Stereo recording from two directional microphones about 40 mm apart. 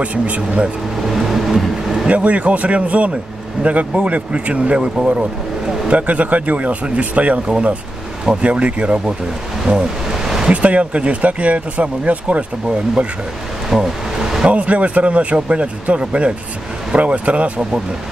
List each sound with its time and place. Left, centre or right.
0.0 s speech: right
1.0 s vehicle: centre
2.0 s speech: right
5.9 s speech: right
9.7 s a sound: right
10.2 s a sound: centre
10.5 s speech: right
13.7 s vehicle: centre
14.5 s speech: right